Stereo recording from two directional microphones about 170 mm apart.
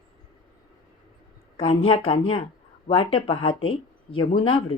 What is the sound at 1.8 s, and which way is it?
Speech, 30° left (ahead or behind).